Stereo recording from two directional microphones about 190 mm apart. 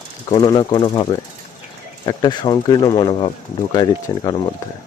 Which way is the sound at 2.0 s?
20° left (ahead or behind).